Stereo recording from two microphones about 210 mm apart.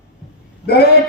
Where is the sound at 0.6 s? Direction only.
50° left (ahead or behind).